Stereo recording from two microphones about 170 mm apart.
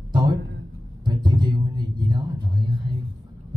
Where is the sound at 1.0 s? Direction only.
25° right (ahead or behind).